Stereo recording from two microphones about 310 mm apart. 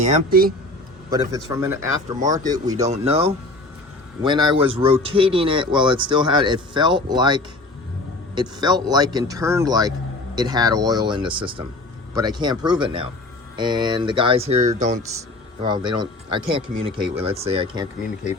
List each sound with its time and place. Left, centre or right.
0.0 s speech: right
1.5 s a man's voice: centre